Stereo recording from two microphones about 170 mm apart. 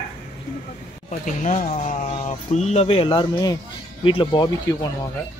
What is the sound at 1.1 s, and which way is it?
Speech, 45° left (ahead or behind).